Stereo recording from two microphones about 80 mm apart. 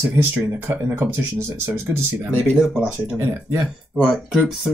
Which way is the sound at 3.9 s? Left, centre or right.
Centre.